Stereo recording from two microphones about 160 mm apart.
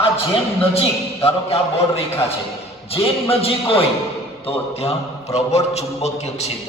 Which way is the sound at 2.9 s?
35° left (ahead or behind).